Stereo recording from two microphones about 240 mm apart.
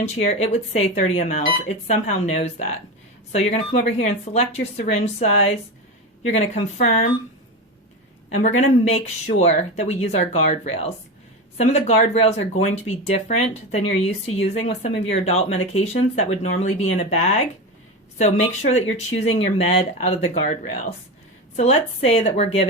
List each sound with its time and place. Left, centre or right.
0.0 s speech: left
8.3 s speech: left